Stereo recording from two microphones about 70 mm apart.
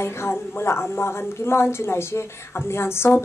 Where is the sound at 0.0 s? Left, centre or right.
Left.